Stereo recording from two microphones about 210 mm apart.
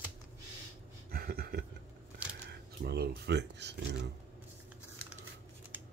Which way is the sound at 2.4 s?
50° right (ahead or behind).